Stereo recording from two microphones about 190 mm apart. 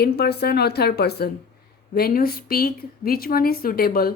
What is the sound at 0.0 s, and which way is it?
A woman's voice, 60° left (ahead or behind).